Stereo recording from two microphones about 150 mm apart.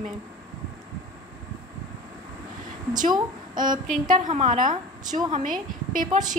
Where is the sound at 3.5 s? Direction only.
60° right (ahead or behind).